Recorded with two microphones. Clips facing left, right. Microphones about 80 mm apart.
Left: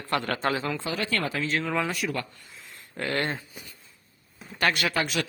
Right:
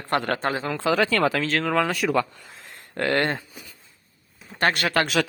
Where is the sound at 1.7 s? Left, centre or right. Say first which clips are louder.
Right 8 dB; right.